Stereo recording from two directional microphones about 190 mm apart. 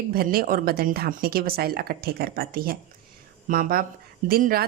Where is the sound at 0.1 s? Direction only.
50° right (ahead or behind).